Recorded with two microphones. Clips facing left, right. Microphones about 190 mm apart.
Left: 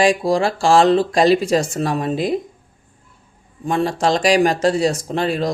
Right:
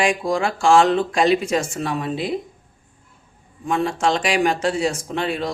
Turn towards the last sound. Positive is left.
turn(degrees=40)  # may be behind; listen again after turning